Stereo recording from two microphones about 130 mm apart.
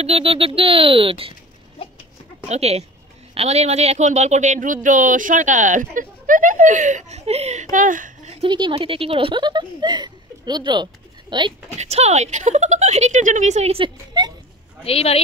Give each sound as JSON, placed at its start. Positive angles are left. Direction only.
{"t": 0.0, "sound": "speech", "side_deg": -50}
{"t": 1.8, "sound": "a sound", "side_deg": 45}
{"t": 2.4, "sound": "speech", "side_deg": -55}
{"t": 4.8, "sound": "speech", "side_deg": -90}
{"t": 7.7, "sound": "speech", "side_deg": -85}
{"t": 8.5, "sound": "speech", "side_deg": -35}
{"t": 11.8, "sound": "speech", "side_deg": -55}
{"t": 14.2, "sound": "speech", "side_deg": -30}
{"t": 14.9, "sound": "speech", "side_deg": 50}